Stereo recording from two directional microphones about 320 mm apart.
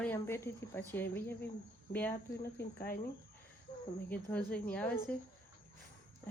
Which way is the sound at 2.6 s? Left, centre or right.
Left.